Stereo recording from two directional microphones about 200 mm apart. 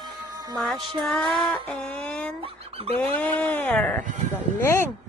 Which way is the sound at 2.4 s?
30° right (ahead or behind).